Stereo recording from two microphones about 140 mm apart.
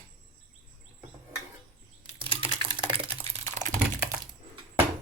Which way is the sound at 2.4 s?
35° right (ahead or behind).